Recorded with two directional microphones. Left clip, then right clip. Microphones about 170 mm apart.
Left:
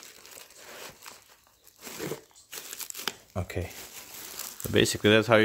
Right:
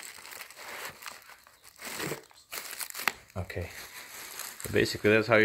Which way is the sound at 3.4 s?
45° left (ahead or behind).